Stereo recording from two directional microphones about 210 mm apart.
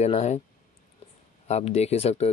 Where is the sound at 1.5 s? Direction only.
30° left (ahead or behind).